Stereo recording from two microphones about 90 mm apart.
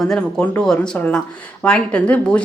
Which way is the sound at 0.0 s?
5° left (ahead or behind).